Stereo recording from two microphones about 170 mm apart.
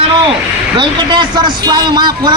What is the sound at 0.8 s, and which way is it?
A man's voice, 25° right (ahead or behind).